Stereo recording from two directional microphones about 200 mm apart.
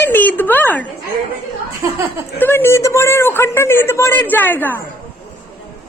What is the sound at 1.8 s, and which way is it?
Speech, 15° right (ahead or behind).